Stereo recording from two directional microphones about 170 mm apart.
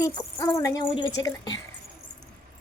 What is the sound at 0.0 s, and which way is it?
Speech, 15° left (ahead or behind).